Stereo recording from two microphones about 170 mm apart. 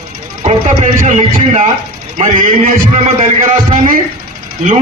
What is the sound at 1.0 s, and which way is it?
A man's voice, 45° right (ahead or behind).